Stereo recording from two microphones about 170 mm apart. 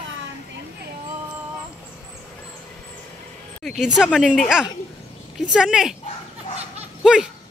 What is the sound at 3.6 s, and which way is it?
Speech, centre (ahead or behind).